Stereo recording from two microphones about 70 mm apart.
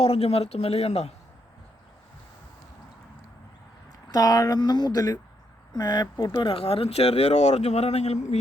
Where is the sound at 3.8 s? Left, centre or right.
Left.